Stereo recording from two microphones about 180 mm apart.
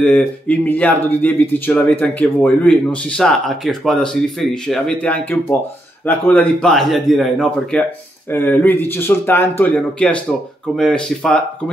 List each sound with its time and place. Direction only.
0.0 s a man's voice: 5° left (ahead or behind)